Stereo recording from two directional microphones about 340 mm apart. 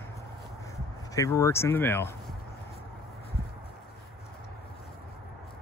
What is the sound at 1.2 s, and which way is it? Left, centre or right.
Speech, centre.